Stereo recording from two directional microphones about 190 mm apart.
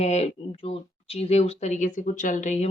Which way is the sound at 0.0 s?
35° left (ahead or behind).